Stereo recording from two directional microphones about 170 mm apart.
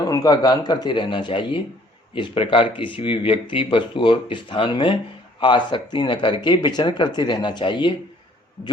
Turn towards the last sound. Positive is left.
turn(degrees=30)  # may be behind; listen again after turning